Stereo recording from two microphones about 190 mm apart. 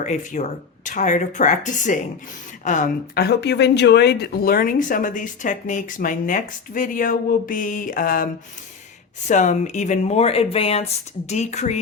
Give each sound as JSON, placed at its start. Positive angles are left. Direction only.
{"t": 0.0, "sound": "speech", "side_deg": 40}